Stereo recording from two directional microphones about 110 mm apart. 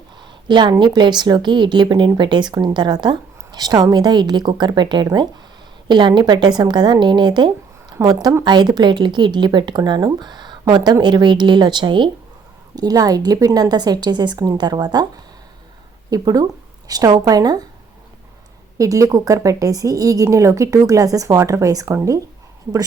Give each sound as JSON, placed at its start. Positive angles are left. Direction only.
{"t": 0.2, "sound": "a woman's voice", "side_deg": -45}
{"t": 12.7, "sound": "a woman's voice", "side_deg": -35}
{"t": 18.8, "sound": "a woman's voice", "side_deg": -30}